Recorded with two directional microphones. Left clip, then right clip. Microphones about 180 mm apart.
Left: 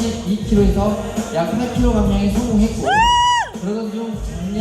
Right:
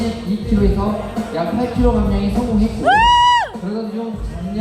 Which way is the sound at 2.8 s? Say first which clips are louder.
Right 3 dB; 50° right (ahead or behind).